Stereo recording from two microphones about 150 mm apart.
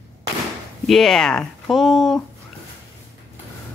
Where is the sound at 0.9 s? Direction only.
5° left (ahead or behind).